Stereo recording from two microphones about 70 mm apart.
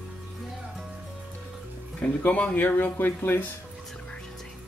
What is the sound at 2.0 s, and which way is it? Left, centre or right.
Speech, centre.